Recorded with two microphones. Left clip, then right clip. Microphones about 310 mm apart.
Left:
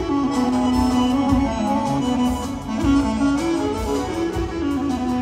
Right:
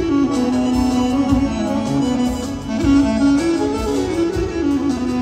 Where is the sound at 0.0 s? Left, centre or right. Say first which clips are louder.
Right 3 dB; left.